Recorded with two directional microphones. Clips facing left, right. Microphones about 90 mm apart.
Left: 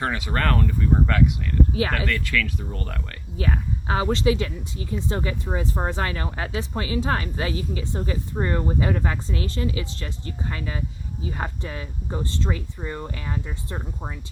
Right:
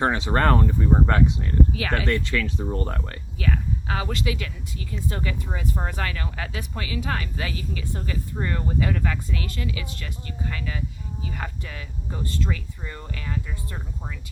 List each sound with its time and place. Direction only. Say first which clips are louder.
0.0 s speech: right 4 dB; 25° right (ahead or behind)
3.3 s speech: left 1 dB; 30° left (ahead or behind)